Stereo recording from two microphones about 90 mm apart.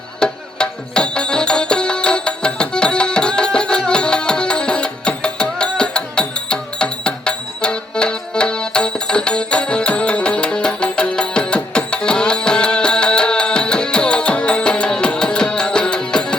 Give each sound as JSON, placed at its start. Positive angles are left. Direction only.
{"t": 0.2, "sound": "music", "side_deg": 10}